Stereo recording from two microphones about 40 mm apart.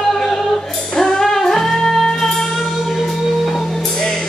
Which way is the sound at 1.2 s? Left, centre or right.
Centre.